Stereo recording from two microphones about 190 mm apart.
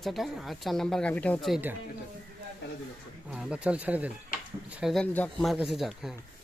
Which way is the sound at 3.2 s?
5° right (ahead or behind).